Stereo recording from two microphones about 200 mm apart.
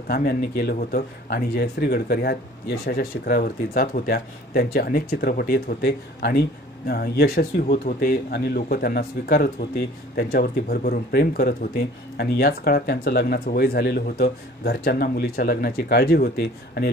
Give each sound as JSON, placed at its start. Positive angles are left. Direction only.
{"t": 0.1, "sound": "speech", "side_deg": 50}